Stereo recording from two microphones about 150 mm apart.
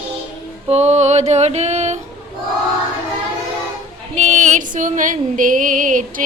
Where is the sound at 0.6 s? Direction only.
45° right (ahead or behind).